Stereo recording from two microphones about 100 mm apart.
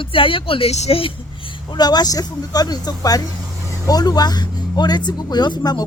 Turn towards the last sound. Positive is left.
turn(degrees=45)  # may be behind; listen again after turning